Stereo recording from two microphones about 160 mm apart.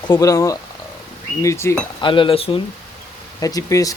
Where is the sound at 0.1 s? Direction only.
20° left (ahead or behind).